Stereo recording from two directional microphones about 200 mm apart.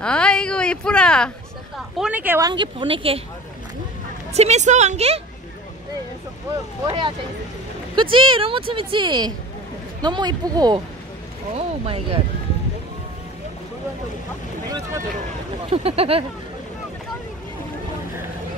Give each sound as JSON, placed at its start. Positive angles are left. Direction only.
{"t": 0.0, "sound": "speech", "side_deg": 5}
{"t": 2.0, "sound": "speech", "side_deg": -5}
{"t": 2.4, "sound": "speech", "side_deg": -25}
{"t": 4.3, "sound": "a woman's voice", "side_deg": -35}
{"t": 6.9, "sound": "speech", "side_deg": -25}
{"t": 15.7, "sound": "speech", "side_deg": -30}